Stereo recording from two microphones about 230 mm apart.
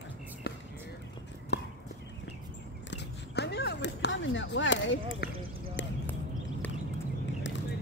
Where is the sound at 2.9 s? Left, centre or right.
Left.